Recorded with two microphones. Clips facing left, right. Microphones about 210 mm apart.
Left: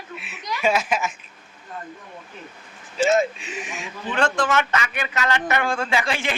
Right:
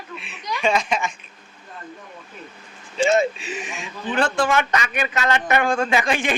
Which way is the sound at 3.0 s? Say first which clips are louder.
Right 1 dB; centre (ahead or behind).